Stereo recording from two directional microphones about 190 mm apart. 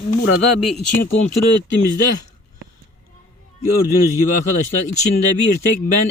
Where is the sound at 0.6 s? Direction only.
Centre (ahead or behind).